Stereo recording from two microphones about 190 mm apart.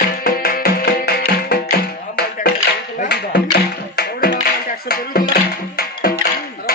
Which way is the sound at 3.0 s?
60° left (ahead or behind).